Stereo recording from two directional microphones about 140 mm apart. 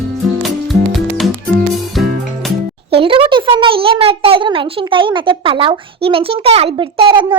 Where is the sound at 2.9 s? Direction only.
40° right (ahead or behind).